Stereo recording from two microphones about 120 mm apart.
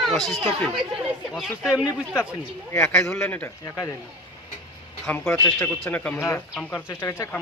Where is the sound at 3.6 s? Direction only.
25° left (ahead or behind).